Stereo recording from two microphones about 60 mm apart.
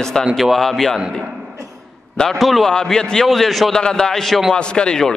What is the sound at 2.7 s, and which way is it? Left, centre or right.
A man's voice, centre.